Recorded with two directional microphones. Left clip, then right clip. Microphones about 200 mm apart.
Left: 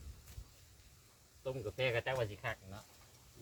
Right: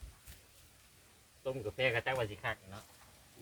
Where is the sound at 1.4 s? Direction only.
10° right (ahead or behind).